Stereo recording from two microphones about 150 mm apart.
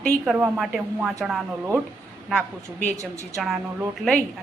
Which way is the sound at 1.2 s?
Centre (ahead or behind).